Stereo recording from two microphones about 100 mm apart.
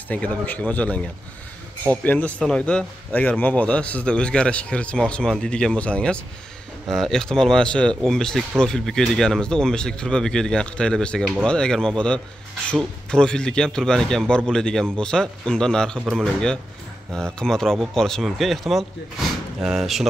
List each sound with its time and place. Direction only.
0.1 s a man's voice: 15° left (ahead or behind); by 20.1 s 5° right (ahead or behind)